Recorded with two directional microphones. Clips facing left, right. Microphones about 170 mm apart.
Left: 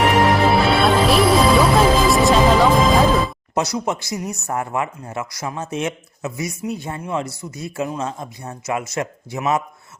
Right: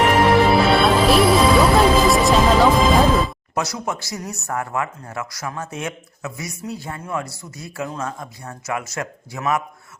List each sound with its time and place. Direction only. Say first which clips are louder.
0.0 s music: right 1 dB; centre (ahead or behind)
3.5 s speech: left 7 dB; 20° left (ahead or behind)